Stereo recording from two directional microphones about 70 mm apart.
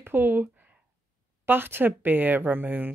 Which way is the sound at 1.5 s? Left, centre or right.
Right.